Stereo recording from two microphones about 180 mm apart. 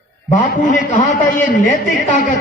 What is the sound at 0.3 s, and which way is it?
A man's voice, 45° left (ahead or behind).